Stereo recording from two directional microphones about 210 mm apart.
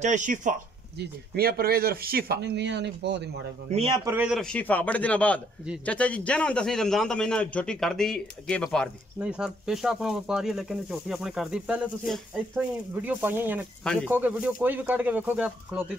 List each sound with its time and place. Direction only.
0.0 s speech: 35° right (ahead or behind); by 3.3 s 55° right (ahead or behind)
3.7 s a man's voice: 25° right (ahead or behind)
4.0 s speech: 10° right (ahead or behind)
4.4 s a man's voice: 5° left (ahead or behind)